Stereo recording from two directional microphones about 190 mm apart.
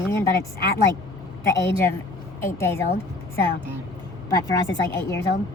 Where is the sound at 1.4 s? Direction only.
15° left (ahead or behind).